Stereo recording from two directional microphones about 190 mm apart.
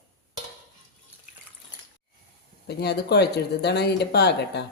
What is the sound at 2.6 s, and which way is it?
Speech, 60° left (ahead or behind).